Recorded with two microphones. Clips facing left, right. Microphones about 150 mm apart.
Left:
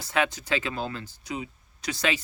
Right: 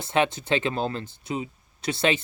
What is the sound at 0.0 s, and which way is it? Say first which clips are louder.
Speech: right 3 dB; 25° right (ahead or behind).